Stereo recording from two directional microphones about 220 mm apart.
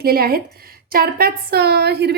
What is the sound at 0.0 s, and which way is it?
A woman's voice, 45° right (ahead or behind).